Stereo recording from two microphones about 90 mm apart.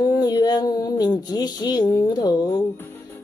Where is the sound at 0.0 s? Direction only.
45° left (ahead or behind).